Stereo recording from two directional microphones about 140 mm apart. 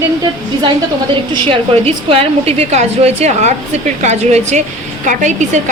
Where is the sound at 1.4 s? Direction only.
40° right (ahead or behind).